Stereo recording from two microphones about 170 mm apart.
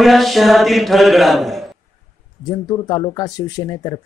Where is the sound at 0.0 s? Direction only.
Centre (ahead or behind).